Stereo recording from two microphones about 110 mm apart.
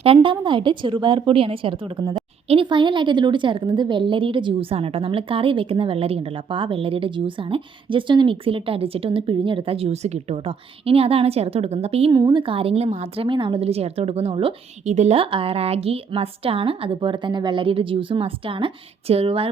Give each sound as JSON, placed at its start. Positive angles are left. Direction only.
{"t": 0.0, "sound": "a woman's voice", "side_deg": -50}
{"t": 4.7, "sound": "speech", "side_deg": -60}
{"t": 12.1, "sound": "speech", "side_deg": -45}
{"t": 13.2, "sound": "speech", "side_deg": -50}
{"t": 14.8, "sound": "speech", "side_deg": -90}
{"t": 15.2, "sound": "speech", "side_deg": -55}